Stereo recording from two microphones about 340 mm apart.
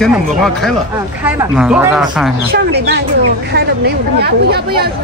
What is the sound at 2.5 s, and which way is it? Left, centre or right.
Speech, right.